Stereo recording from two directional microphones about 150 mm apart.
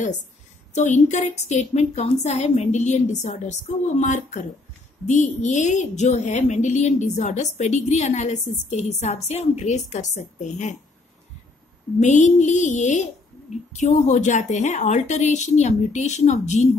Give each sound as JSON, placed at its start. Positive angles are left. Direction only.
{"t": 0.7, "sound": "a woman's voice", "side_deg": 50}
{"t": 12.0, "sound": "a woman's voice", "side_deg": 50}